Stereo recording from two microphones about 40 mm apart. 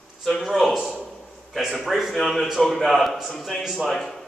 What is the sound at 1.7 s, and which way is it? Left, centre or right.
Speech, centre.